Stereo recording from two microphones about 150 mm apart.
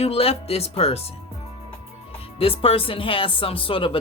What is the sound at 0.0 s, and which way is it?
Speech, 40° left (ahead or behind).